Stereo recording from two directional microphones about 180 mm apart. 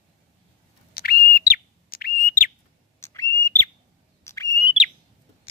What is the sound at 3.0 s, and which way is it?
Bird, 15° left (ahead or behind).